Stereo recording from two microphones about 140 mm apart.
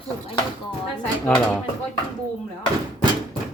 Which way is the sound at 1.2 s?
10° left (ahead or behind).